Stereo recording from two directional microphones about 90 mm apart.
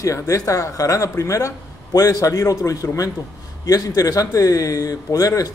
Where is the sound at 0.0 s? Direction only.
35° left (ahead or behind).